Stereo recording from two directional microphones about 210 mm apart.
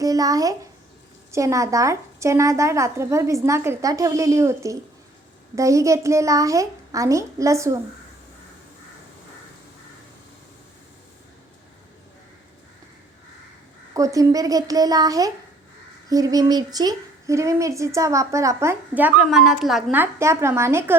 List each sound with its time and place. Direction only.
0.0 s speech: 15° right (ahead or behind)
13.9 s speech: 15° right (ahead or behind)